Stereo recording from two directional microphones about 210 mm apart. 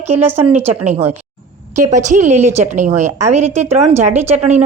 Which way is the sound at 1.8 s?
35° right (ahead or behind).